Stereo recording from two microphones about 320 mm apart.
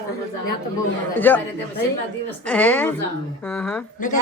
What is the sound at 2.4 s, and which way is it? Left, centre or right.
Speech, centre.